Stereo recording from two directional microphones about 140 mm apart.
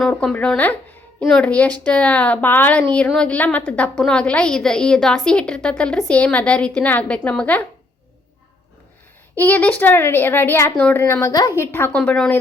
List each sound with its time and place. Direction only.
0.1 s a woman's voice: 10° left (ahead or behind)
9.3 s a woman's voice: 15° left (ahead or behind)